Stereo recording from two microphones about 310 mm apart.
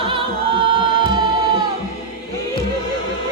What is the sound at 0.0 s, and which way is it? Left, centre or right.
Music, centre.